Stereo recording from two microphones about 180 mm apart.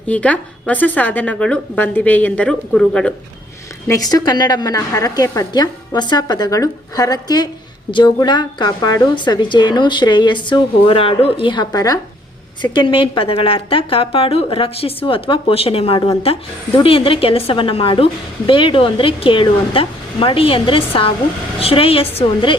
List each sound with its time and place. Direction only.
0.1 s a woman's voice: 5° left (ahead or behind)
3.8 s a woman's voice: 20° left (ahead or behind)